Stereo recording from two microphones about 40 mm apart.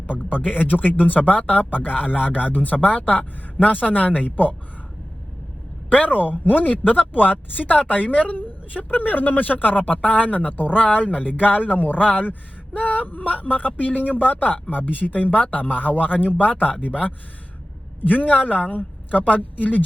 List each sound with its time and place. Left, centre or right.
0.9 s speech: left
6.4 s a woman's voice: left